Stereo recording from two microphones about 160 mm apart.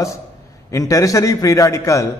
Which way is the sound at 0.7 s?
20° left (ahead or behind).